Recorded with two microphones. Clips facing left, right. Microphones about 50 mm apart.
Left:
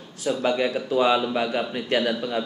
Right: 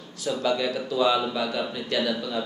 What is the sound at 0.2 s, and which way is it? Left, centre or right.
Speech, left.